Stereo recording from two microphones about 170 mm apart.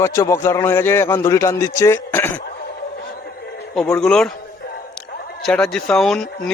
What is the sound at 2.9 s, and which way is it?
Music, 70° left (ahead or behind).